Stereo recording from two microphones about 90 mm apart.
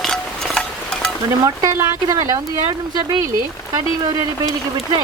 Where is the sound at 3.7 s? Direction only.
45° right (ahead or behind).